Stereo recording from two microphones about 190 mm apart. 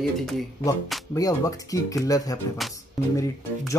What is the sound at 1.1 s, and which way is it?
Speech, 20° left (ahead or behind).